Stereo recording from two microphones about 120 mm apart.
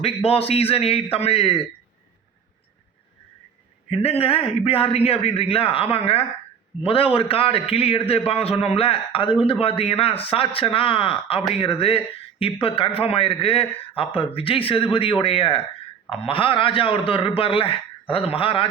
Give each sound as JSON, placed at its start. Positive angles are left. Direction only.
{"t": 0.0, "sound": "a man's voice", "side_deg": 55}
{"t": 3.8, "sound": "speech", "side_deg": 55}